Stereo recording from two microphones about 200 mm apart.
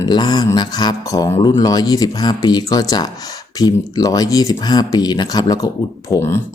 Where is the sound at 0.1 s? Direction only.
20° left (ahead or behind).